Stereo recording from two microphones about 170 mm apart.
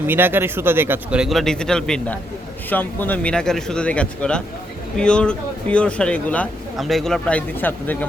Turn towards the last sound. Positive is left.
turn(degrees=10)  # may be behind; listen again after turning